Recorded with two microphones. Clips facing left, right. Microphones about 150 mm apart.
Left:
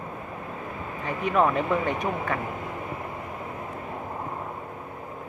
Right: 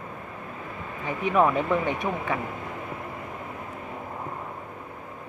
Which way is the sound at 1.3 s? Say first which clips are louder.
Right 1 dB; 5° right (ahead or behind).